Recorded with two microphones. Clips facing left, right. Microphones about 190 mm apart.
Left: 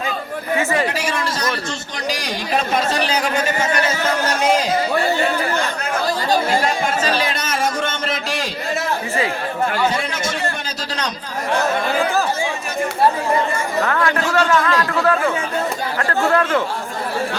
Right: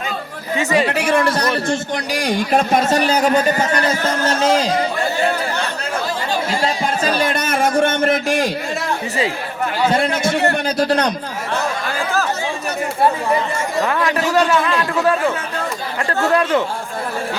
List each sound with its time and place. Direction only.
0.6 s a man's voice: 15° right (ahead or behind)
0.9 s a man's voice: 60° right (ahead or behind); by 3.4 s 40° right (ahead or behind)
7.0 s a sound: 50° right (ahead or behind)
9.9 s a sound: 55° right (ahead or behind)
13.8 s a man's voice: 15° right (ahead or behind)
16.3 s a man's voice: 15° right (ahead or behind)